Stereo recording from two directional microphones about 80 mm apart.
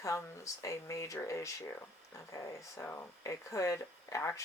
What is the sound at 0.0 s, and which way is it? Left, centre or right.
Speech, left.